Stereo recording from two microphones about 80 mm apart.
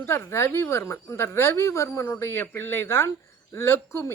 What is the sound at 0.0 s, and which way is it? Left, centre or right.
A woman's voice, left.